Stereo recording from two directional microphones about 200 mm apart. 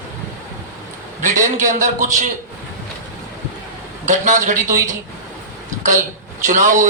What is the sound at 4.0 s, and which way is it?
Speech, 40° right (ahead or behind).